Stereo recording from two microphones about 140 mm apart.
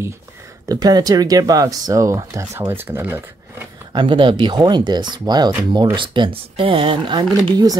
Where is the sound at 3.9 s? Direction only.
35° right (ahead or behind).